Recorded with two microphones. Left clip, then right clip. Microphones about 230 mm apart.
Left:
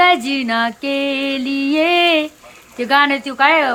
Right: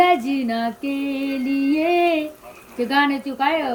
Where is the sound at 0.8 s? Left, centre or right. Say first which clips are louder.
Left 7 dB; left.